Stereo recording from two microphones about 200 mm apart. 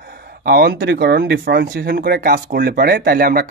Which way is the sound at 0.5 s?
50° right (ahead or behind).